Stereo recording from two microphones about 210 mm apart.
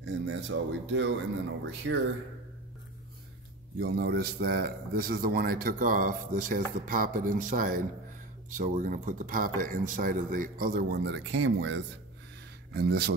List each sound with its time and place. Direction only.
0.0 s speech: 60° right (ahead or behind)
3.8 s a man's voice: 50° right (ahead or behind)